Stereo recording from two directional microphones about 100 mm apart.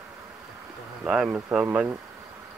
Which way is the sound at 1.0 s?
10° right (ahead or behind).